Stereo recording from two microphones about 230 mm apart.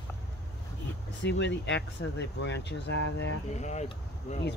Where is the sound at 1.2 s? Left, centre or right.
Left.